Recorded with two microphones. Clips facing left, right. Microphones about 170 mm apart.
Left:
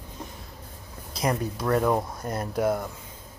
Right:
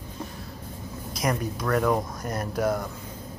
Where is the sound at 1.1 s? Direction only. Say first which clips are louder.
Left 1 dB; 30° left (ahead or behind).